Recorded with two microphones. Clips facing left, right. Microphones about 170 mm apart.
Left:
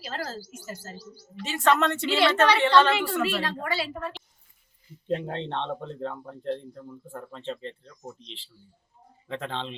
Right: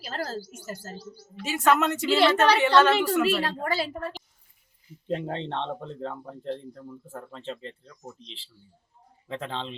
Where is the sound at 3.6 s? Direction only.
45° right (ahead or behind).